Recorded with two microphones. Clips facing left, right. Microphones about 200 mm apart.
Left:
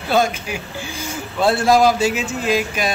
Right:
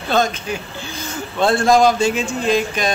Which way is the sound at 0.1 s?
10° left (ahead or behind).